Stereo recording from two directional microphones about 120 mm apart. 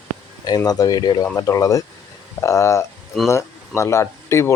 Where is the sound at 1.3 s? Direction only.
30° left (ahead or behind).